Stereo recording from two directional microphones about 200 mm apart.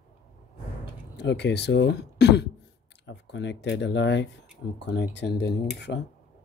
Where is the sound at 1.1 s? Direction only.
60° left (ahead or behind).